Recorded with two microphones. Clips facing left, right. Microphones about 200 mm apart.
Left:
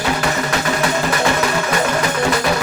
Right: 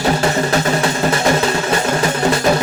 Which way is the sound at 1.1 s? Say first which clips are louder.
Right 2 dB; 25° right (ahead or behind).